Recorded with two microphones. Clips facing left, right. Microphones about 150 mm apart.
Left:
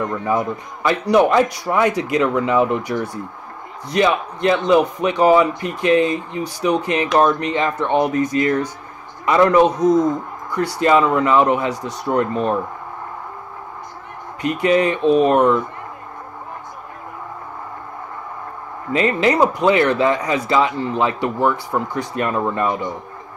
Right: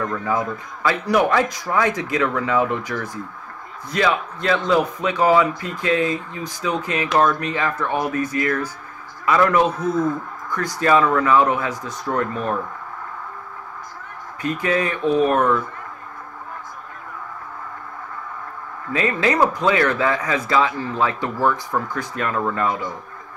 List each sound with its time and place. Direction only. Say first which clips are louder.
0.0 s speech: left 3 dB; 20° left (ahead or behind)
14.4 s speech: left 5 dB; 20° left (ahead or behind)
18.9 s speech: left 4 dB; 20° left (ahead or behind)